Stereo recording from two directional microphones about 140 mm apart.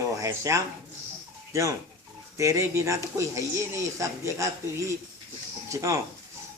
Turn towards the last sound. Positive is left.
turn(degrees=-20)  # may be behind; listen again after turning